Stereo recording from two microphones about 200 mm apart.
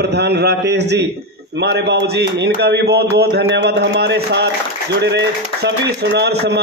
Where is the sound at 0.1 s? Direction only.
55° right (ahead or behind).